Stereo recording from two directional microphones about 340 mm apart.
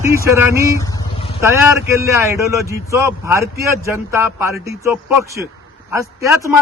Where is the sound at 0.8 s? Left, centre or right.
Centre.